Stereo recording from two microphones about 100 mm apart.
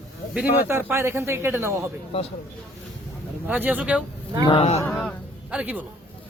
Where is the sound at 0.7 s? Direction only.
25° right (ahead or behind).